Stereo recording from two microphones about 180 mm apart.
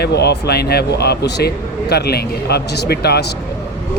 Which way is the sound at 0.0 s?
65° left (ahead or behind).